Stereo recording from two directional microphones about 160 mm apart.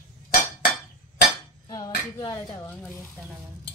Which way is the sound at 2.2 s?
20° left (ahead or behind).